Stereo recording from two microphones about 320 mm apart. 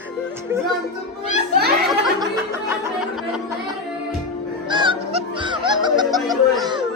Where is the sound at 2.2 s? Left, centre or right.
Centre.